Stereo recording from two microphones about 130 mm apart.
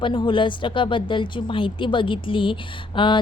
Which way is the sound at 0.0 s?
40° left (ahead or behind).